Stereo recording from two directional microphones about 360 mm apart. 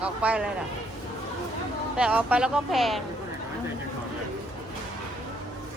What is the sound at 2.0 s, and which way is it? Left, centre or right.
Speech, centre.